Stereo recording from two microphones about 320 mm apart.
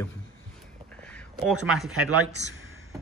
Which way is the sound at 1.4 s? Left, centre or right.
Centre.